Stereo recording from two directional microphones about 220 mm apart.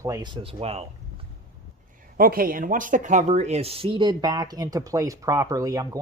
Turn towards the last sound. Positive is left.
turn(degrees=-15)  # may be behind; listen again after turning